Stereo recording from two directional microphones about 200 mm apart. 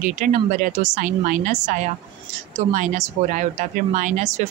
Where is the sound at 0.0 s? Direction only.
40° right (ahead or behind).